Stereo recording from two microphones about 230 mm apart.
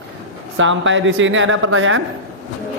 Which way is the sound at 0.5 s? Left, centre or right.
Right.